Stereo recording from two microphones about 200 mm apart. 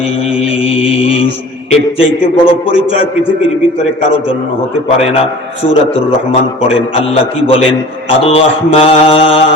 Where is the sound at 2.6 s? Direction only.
25° left (ahead or behind).